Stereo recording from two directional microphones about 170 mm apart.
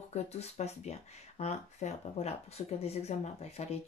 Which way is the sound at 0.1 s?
40° left (ahead or behind).